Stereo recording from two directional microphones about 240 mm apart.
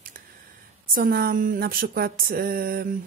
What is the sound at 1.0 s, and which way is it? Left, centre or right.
Speech, right.